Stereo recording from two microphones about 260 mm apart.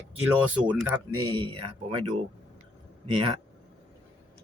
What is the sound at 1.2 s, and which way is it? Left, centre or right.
Speech, centre.